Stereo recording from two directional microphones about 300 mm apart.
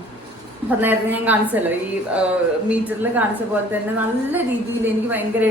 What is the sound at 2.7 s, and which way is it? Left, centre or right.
A woman's voice, centre.